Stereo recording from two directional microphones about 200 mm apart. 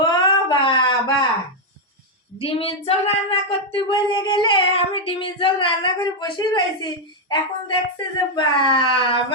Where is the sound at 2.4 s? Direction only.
30° left (ahead or behind).